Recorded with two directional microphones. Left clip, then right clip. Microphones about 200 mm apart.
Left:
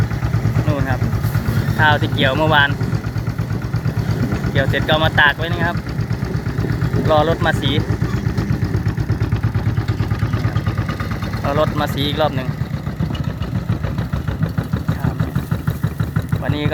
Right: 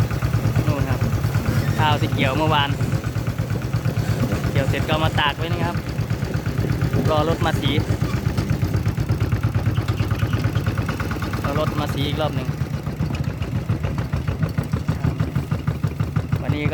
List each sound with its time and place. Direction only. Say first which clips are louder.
1.8 s speech: left 6 dB; 10° left (ahead or behind)
4.5 s speech: left 7 dB; 10° left (ahead or behind)
7.1 s speech: left 6 dB; 10° left (ahead or behind)
11.4 s speech: left 7 dB; 20° left (ahead or behind)
16.5 s speech: left 4 dB; 20° left (ahead or behind)